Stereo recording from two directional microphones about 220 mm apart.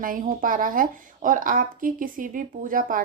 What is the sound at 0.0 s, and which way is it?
Speech, 40° right (ahead or behind).